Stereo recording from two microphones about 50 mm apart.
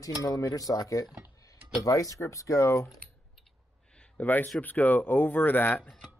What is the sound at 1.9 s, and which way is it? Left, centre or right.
Speech, left.